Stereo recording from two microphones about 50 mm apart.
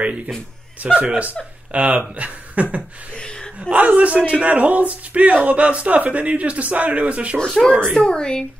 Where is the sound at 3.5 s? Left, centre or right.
Right.